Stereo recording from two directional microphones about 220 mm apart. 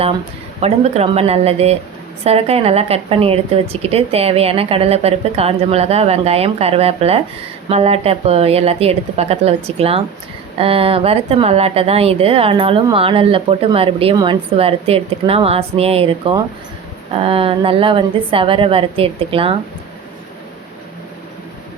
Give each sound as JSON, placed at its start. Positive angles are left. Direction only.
{"t": 0.6, "sound": "a woman's voice", "side_deg": -30}